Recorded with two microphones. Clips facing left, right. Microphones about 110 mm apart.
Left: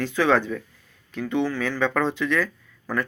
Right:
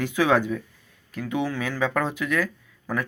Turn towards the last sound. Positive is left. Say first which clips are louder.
# left 1 dB
turn(degrees=-10)  # may be behind; listen again after turning